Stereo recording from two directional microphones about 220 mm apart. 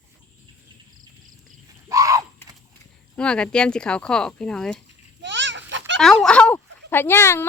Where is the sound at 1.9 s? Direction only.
15° right (ahead or behind).